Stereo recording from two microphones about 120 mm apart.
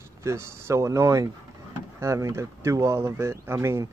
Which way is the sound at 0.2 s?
25° right (ahead or behind).